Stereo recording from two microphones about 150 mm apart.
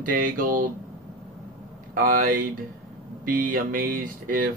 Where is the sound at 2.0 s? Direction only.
70° right (ahead or behind).